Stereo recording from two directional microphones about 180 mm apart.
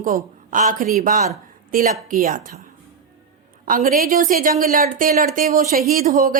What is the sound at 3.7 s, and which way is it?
A woman's voice, 50° right (ahead or behind).